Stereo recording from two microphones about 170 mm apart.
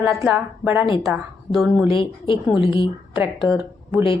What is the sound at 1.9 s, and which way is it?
Speech, 30° left (ahead or behind).